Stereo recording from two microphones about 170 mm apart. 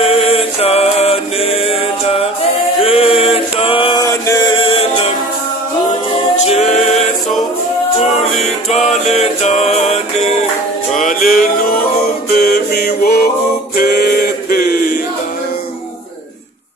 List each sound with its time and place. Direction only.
0.0 s music: 35° left (ahead or behind)
4.0 s music: 20° left (ahead or behind)
6.3 s a capella: 40° left (ahead or behind)
8.4 s music: 40° left (ahead or behind); by 13.2 s 65° left (ahead or behind)
13.7 s a sound: 65° left (ahead or behind)